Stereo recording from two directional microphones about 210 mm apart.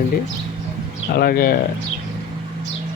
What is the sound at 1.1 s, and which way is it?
Speech, 45° left (ahead or behind).